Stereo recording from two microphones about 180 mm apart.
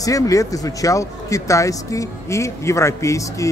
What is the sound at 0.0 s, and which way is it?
Speech, 20° left (ahead or behind).